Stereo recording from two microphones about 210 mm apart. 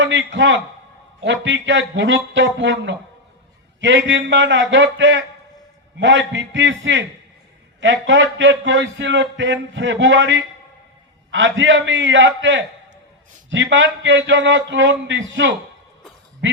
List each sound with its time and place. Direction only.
0.0 s a man's voice: 60° right (ahead or behind)